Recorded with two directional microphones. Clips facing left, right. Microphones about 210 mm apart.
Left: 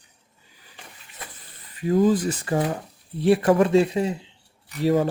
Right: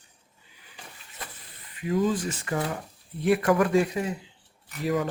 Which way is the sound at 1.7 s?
35° left (ahead or behind).